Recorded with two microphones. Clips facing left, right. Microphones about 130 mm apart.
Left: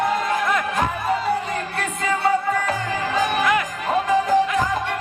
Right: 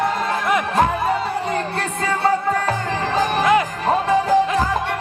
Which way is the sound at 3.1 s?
30° right (ahead or behind).